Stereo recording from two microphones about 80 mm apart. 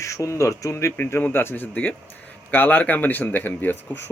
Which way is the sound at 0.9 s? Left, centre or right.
Left.